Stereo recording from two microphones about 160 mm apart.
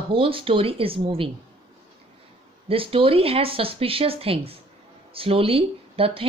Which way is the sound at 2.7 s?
35° right (ahead or behind).